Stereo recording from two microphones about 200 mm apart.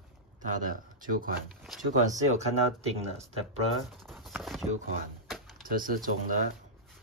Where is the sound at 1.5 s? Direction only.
Centre (ahead or behind).